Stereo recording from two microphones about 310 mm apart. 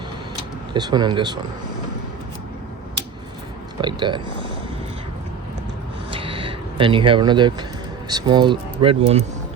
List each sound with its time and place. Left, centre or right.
0.7 s speech: centre
3.8 s speech: centre
6.1 s a sound: centre
8.0 s speech: centre